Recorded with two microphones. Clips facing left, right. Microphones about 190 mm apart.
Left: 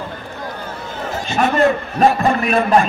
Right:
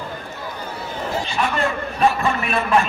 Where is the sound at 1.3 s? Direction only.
45° left (ahead or behind).